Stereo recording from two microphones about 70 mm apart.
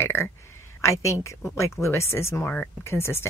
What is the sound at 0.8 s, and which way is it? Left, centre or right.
Speech, left.